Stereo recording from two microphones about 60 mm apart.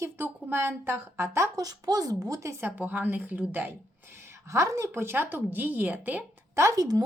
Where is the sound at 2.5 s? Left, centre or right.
Right.